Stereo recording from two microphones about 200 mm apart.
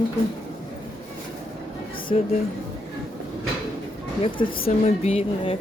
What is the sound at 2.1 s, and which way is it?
Speech, 30° left (ahead or behind).